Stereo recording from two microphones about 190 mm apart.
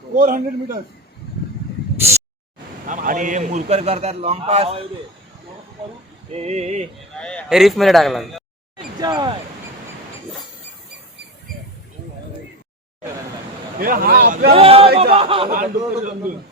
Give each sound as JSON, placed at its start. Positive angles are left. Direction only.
{"t": 0.2, "sound": "a man's voice", "side_deg": -45}
{"t": 2.9, "sound": "a man's voice", "side_deg": -45}
{"t": 6.3, "sound": "a man's voice", "side_deg": -35}
{"t": 7.2, "sound": "a man's voice", "side_deg": 5}
{"t": 9.0, "sound": "speech", "side_deg": -20}
{"t": 13.7, "sound": "a man's voice", "side_deg": -50}
{"t": 14.5, "sound": "a man's voice", "side_deg": -30}
{"t": 15.4, "sound": "a man's voice", "side_deg": -45}